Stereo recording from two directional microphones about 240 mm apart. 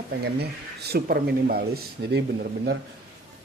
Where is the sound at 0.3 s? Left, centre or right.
Right.